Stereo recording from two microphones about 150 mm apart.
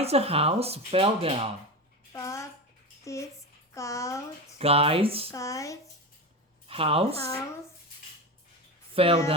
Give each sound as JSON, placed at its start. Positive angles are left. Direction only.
{"t": 0.0, "sound": "speech", "side_deg": -40}
{"t": 2.1, "sound": "bathtub", "side_deg": 20}
{"t": 3.0, "sound": "speech", "side_deg": 20}
{"t": 4.5, "sound": "speech", "side_deg": -40}
{"t": 5.3, "sound": "speech", "side_deg": 20}
{"t": 6.7, "sound": "speech", "side_deg": -40}
{"t": 9.0, "sound": "speech", "side_deg": -40}